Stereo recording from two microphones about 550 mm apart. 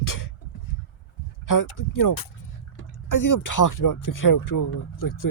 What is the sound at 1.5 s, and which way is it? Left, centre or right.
Speech, left.